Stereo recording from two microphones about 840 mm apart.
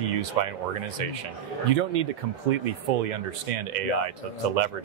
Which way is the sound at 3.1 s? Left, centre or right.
Right.